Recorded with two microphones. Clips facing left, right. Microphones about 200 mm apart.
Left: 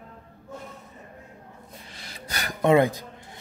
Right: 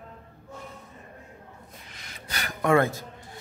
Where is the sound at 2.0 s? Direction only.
35° left (ahead or behind).